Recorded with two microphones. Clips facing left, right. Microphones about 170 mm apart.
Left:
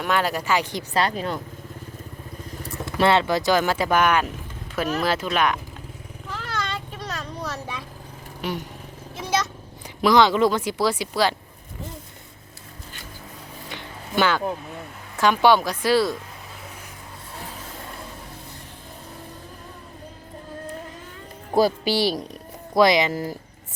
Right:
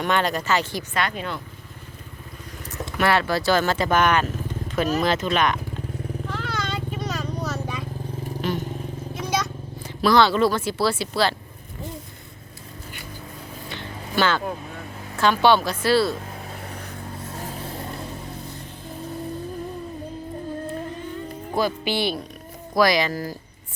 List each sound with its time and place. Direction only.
0.0 s speech: 5° left (ahead or behind)
0.9 s speech: 35° left (ahead or behind)
3.0 s speech: 25° left (ahead or behind); by 5.5 s 5° left (ahead or behind)
6.3 s vehicle: centre (ahead or behind)
8.4 s vehicle: 10° left (ahead or behind)
10.0 s speech: 15° left (ahead or behind)
13.7 s a sound: 15° left (ahead or behind)
15.2 s speech: 15° left (ahead or behind)
21.5 s speech: 35° left (ahead or behind)
22.7 s speech: 25° left (ahead or behind)